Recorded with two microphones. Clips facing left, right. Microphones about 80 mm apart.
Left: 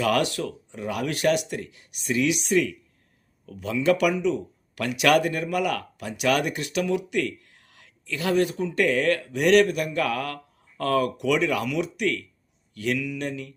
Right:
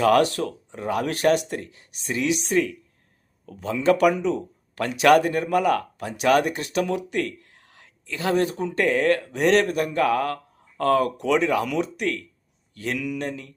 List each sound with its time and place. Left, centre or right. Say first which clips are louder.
0.0 s speech: right 5 dB; right